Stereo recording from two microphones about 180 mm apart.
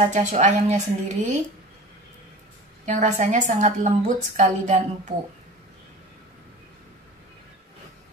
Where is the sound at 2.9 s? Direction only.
45° right (ahead or behind).